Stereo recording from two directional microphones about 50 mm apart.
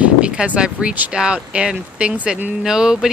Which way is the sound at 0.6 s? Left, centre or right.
Centre.